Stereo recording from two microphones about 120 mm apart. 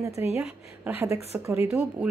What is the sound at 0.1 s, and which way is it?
Speech, 60° left (ahead or behind).